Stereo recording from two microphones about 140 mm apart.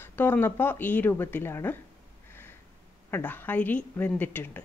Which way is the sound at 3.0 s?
15° left (ahead or behind).